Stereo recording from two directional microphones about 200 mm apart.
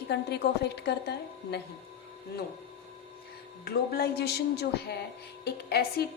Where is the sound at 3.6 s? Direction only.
55° left (ahead or behind).